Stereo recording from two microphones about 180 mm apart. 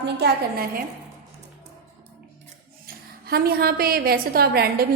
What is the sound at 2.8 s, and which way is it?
A woman's voice, 55° right (ahead or behind).